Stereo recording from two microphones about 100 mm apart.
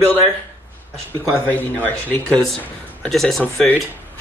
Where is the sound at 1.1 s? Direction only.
20° left (ahead or behind).